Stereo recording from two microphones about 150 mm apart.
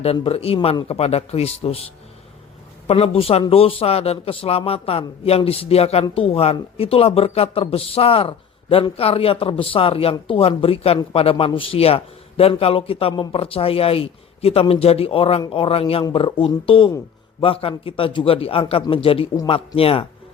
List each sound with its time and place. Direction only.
0.0 s a man's voice: 40° left (ahead or behind)
2.8 s a man's voice: 40° left (ahead or behind)